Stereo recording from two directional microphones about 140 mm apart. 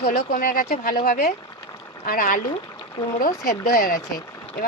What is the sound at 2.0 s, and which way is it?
Speech, 80° left.